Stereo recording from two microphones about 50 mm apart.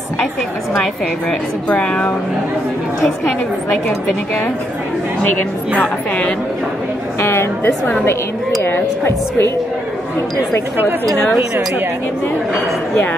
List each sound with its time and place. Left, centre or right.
1.7 s a woman's voice: left
7.2 s a woman's voice: left